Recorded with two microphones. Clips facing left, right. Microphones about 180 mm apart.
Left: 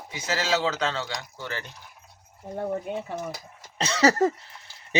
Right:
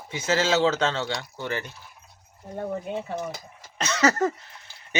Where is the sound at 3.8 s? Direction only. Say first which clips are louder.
Left 2 dB; 30° left (ahead or behind).